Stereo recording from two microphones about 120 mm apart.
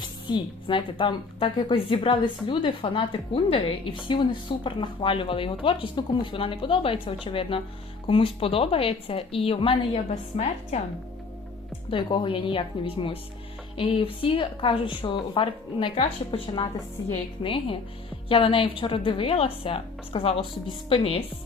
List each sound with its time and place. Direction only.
0.0 s a woman's voice: 40° left (ahead or behind); by 10.8 s 65° left (ahead or behind)
11.9 s a woman's voice: 45° left (ahead or behind)
16.0 s a woman's voice: 55° left (ahead or behind)